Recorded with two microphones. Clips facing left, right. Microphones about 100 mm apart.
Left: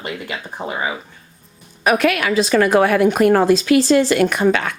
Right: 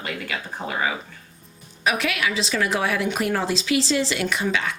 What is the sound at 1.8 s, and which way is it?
A woman's voice, 50° left (ahead or behind).